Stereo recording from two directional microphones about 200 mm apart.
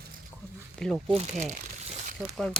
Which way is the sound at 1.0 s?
30° right (ahead or behind).